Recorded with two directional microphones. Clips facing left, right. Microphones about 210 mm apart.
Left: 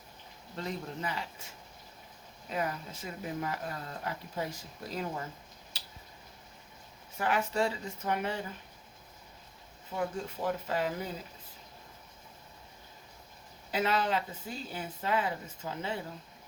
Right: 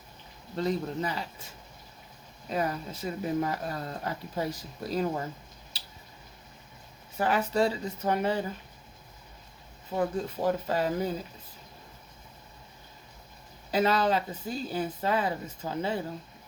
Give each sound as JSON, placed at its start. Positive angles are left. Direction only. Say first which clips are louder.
{"t": 0.5, "sound": "speech", "louder": "right 8 dB", "side_deg": -35}
{"t": 2.5, "sound": "speech", "louder": "right 4 dB", "side_deg": -35}
{"t": 7.2, "sound": "speech", "louder": "right 4 dB", "side_deg": -35}
{"t": 9.9, "sound": "speech", "louder": "right 5 dB", "side_deg": -35}
{"t": 13.7, "sound": "speech", "louder": "right 5 dB", "side_deg": -35}